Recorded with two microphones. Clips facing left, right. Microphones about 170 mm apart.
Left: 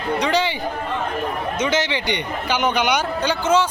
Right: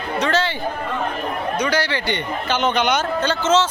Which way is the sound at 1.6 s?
20° left (ahead or behind).